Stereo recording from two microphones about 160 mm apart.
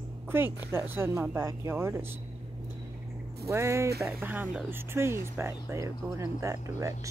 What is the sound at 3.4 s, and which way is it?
Speech, 15° right (ahead or behind).